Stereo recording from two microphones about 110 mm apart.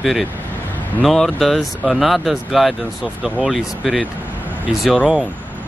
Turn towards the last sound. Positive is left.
turn(degrees=-5)  # may be behind; listen again after turning